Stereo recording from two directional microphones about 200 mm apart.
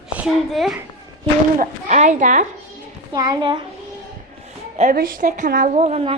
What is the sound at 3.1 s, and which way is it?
Speech, 20° right (ahead or behind).